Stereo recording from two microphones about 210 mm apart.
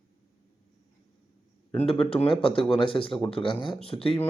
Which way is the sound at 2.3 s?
25° left (ahead or behind).